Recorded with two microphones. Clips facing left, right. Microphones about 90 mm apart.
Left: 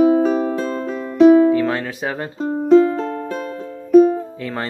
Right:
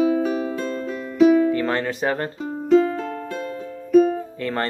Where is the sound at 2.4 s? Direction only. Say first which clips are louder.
Left 6 dB; 35° left (ahead or behind).